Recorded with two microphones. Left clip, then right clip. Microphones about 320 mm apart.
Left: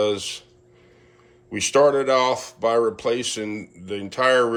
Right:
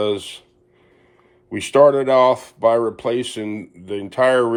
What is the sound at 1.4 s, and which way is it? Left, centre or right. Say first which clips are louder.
Speech: right 4 dB; right.